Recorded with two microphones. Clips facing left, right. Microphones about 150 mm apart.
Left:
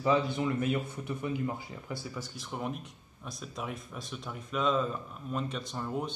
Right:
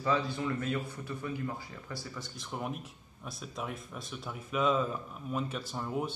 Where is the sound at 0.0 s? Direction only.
20° left (ahead or behind).